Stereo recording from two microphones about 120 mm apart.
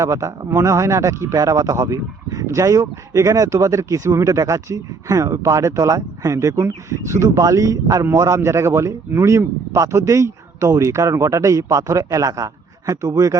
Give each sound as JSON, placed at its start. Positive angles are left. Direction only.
{"t": 0.0, "sound": "a man's voice", "side_deg": -25}